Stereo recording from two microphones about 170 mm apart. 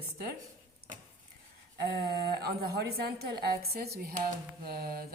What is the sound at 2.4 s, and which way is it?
A woman's voice, 70° right (ahead or behind).